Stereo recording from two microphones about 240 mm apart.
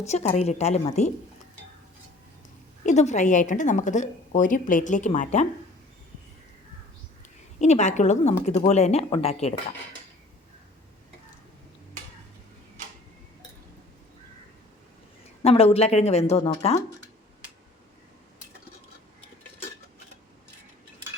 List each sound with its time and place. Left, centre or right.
0.1 s a woman's voice: left
2.8 s a woman's voice: left
7.6 s a woman's voice: left
15.4 s a woman's voice: left